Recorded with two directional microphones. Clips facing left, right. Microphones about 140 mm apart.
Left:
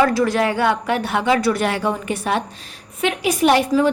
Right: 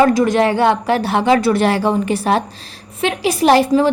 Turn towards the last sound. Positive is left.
turn(degrees=-35)  # may be behind; listen again after turning